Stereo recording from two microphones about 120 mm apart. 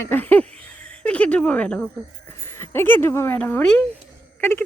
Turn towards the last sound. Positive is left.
turn(degrees=20)  # may be behind; listen again after turning